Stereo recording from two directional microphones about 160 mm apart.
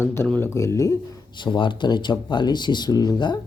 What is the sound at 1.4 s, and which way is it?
Speech, 30° left (ahead or behind).